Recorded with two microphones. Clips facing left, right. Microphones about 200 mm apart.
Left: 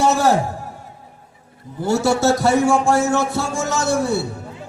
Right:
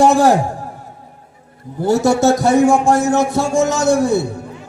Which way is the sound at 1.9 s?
15° right (ahead or behind).